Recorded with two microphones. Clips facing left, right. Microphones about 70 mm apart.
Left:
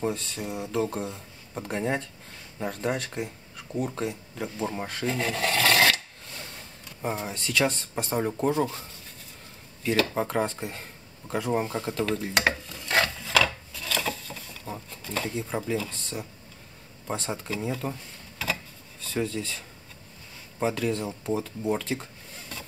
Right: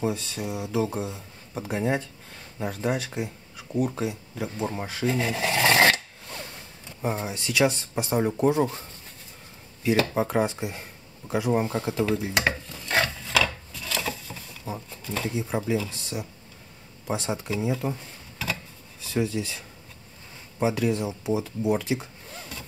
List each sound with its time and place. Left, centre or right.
0.0 s speech: centre
5.6 s filing: right
7.0 s speech: centre
10.1 s a sound: centre
17.1 s speech: centre
18.4 s a sound: centre
20.5 s speech: centre